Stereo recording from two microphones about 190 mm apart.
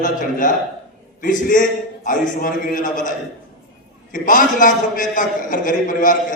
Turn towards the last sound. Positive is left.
turn(degrees=45)  # may be behind; listen again after turning